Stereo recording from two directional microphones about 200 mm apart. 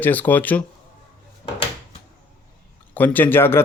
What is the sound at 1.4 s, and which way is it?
Drawer open or close, 30° left (ahead or behind).